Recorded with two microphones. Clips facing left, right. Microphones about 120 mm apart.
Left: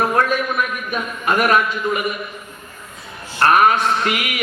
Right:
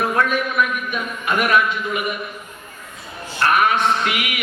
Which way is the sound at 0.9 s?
40° left (ahead or behind).